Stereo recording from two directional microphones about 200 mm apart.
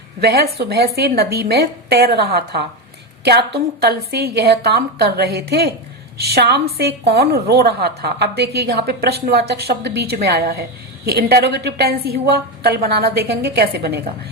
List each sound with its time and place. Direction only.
0.2 s a woman's voice: 50° right (ahead or behind)